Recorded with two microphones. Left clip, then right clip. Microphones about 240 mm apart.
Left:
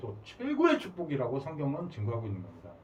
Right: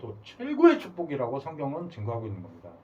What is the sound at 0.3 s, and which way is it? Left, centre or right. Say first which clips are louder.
Speech: right 6 dB; centre.